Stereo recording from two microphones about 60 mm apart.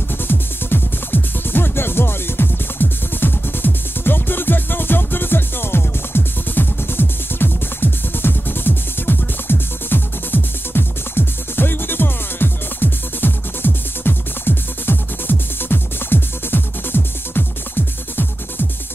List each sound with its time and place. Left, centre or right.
0.3 s music: left